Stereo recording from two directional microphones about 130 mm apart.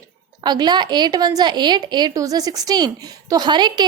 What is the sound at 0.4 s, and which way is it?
A woman's voice, 35° right (ahead or behind).